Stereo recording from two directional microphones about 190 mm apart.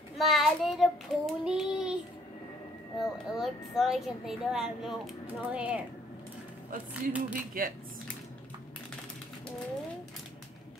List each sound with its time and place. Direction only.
0.2 s child singing: centre (ahead or behind)
3.0 s a woman's voice: centre (ahead or behind)
6.9 s speech: 5° right (ahead or behind)
7.6 s speech: 45° right (ahead or behind)